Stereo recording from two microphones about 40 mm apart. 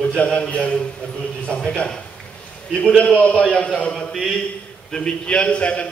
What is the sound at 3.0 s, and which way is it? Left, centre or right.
Speech, left.